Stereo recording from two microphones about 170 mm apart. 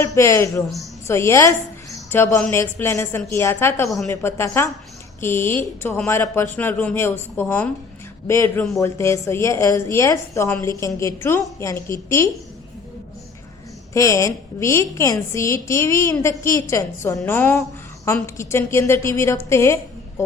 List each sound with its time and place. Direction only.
0.0 s a woman's voice: 15° left (ahead or behind)
13.9 s a woman's voice: 20° left (ahead or behind)